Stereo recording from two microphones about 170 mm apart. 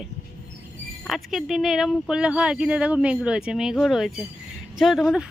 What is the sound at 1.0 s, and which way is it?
Speech, centre (ahead or behind).